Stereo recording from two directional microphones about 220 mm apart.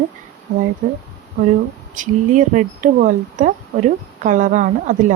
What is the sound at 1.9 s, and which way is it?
Speech, 35° right (ahead or behind).